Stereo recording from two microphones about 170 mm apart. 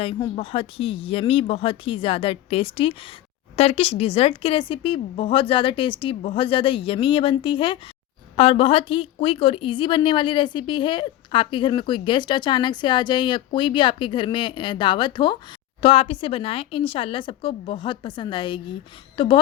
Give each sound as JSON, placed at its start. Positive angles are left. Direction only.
{"t": 0.0, "sound": "a woman's voice", "side_deg": 35}